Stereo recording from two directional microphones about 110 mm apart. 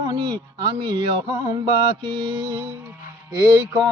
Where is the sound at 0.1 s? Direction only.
50° right (ahead or behind).